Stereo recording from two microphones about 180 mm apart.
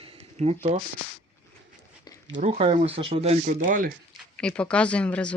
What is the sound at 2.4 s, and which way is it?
Speech, 35° right (ahead or behind).